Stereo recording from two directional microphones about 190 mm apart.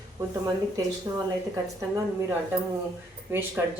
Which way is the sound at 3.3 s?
10° right (ahead or behind).